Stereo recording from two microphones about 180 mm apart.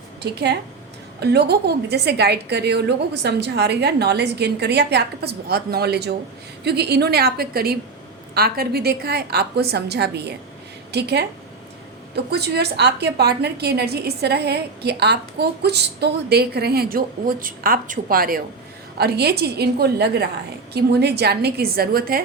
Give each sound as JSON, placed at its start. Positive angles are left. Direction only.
{"t": 0.2, "sound": "a woman's voice", "side_deg": -65}